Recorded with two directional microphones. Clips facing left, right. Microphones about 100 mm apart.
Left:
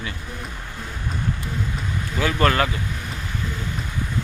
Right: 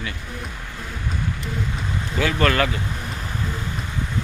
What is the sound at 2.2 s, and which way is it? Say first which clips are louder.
Speech: even; 30° left (ahead or behind).